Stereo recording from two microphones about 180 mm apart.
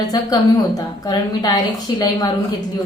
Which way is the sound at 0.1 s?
20° left (ahead or behind).